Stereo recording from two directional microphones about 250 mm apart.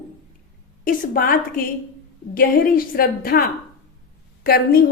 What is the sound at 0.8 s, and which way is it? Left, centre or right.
A woman's voice, left.